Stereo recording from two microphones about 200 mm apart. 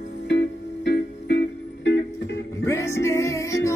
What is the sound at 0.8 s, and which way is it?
Music, 60° left (ahead or behind).